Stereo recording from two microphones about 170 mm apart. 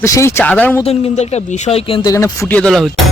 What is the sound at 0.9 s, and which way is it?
Speech, 40° left (ahead or behind).